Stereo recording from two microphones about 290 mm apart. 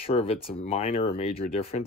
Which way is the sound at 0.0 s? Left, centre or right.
Centre.